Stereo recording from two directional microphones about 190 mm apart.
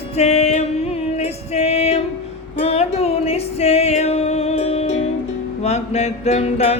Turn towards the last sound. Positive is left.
turn(degrees=35)  # may be behind; listen again after turning